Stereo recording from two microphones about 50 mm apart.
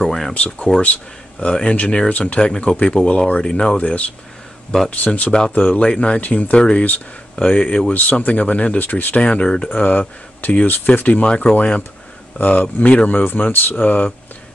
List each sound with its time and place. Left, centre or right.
0.0 s speech: centre
0.3 s speech: left
11.2 s speech: centre